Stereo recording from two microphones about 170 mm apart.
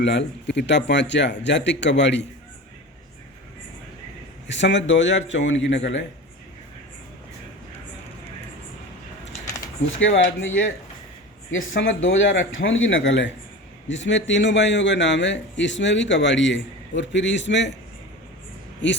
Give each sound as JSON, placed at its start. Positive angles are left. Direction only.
{"t": 0.0, "sound": "a man's voice", "side_deg": 90}
{"t": 4.4, "sound": "a man's voice", "side_deg": 90}
{"t": 10.0, "sound": "a man's voice", "side_deg": 90}
{"t": 11.8, "sound": "a man's voice", "side_deg": 90}